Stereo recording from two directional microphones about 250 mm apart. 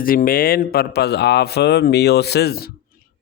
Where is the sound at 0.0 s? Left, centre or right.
Left.